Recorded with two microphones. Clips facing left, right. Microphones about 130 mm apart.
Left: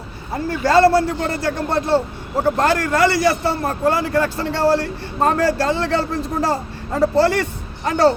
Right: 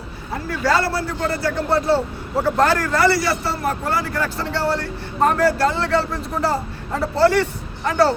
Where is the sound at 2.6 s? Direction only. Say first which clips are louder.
Left 1 dB; 20° left (ahead or behind).